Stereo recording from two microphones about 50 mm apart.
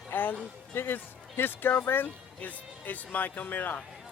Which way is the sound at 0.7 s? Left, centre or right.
Left.